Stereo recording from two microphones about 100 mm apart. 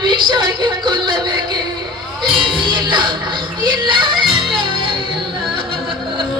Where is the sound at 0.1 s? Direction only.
50° right (ahead or behind).